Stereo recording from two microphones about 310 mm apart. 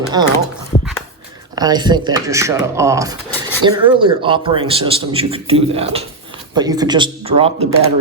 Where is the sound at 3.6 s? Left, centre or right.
Centre.